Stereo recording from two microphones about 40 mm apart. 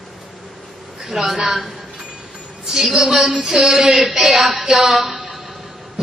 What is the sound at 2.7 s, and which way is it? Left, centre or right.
A man's voice, centre.